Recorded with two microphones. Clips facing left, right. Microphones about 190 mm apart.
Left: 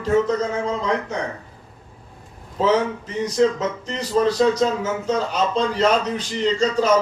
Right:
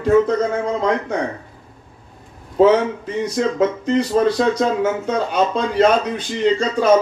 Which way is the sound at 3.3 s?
55° right (ahead or behind).